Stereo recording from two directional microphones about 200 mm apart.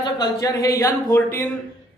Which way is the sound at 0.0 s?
20° left (ahead or behind).